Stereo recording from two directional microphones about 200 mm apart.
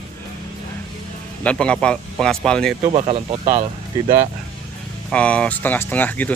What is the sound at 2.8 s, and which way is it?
Speech, 30° right (ahead or behind).